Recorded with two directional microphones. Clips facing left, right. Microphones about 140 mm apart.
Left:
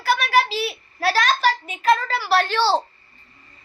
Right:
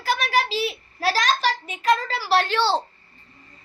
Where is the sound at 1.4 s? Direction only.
40° left (ahead or behind).